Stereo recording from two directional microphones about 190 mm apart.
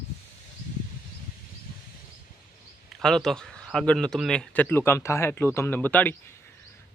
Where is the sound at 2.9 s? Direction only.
Centre (ahead or behind).